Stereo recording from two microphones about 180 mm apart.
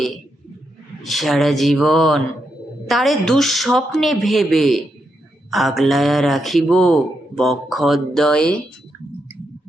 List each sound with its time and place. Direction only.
1.0 s a man's voice: centre (ahead or behind)